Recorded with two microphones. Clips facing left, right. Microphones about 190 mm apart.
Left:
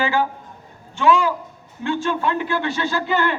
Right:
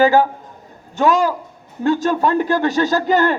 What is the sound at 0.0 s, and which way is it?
A man's voice, 40° right (ahead or behind).